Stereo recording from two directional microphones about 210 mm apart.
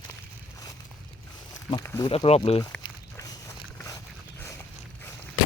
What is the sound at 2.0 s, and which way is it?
Speech, 30° left (ahead or behind).